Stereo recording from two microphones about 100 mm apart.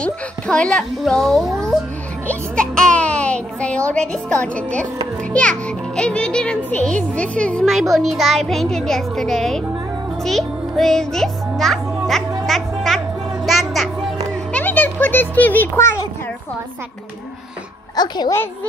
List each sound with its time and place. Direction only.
0.0 s a child's voice: 10° left (ahead or behind)
1.6 s music: centre (ahead or behind)
2.2 s a child's voice: 10° left (ahead or behind)
12.4 s music: centre (ahead or behind)
14.5 s a sound: 15° left (ahead or behind)
17.9 s a child's voice: 45° left (ahead or behind)
18.3 s a woman's voice: 20° left (ahead or behind)